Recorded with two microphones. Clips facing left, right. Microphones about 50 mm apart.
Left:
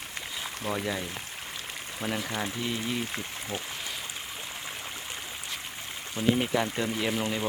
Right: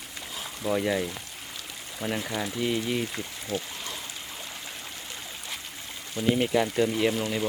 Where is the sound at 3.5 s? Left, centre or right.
Left.